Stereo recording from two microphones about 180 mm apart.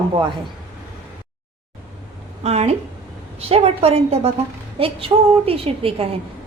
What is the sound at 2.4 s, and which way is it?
A woman's voice, 35° right (ahead or behind).